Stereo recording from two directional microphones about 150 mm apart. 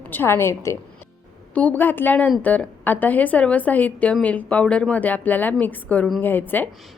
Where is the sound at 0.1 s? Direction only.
15° left (ahead or behind).